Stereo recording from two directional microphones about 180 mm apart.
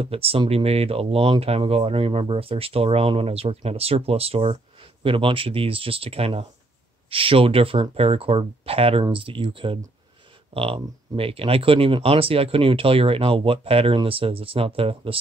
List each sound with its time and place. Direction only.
0.0 s speech: 30° right (ahead or behind)